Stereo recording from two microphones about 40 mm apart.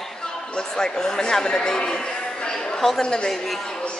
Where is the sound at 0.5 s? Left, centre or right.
Centre.